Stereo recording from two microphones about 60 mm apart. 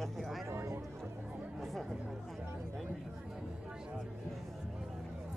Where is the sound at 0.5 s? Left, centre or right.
Right.